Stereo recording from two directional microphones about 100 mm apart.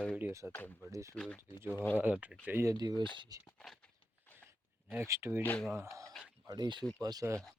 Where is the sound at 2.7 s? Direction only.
45° right (ahead or behind).